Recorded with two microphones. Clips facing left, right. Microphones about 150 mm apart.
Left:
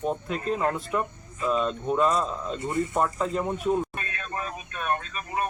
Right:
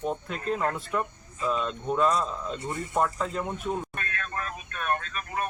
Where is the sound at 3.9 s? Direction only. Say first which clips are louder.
Left 1 dB; 15° left (ahead or behind).